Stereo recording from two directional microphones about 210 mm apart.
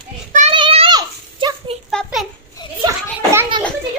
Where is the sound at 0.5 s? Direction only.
25° right (ahead or behind).